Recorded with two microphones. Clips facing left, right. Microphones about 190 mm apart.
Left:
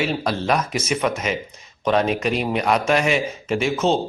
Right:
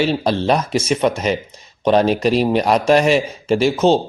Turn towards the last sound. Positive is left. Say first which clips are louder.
# right 6 dB
turn(degrees=-35)  # may be behind; listen again after turning